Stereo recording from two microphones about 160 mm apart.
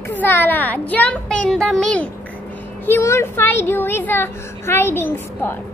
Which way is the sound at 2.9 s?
15° left (ahead or behind).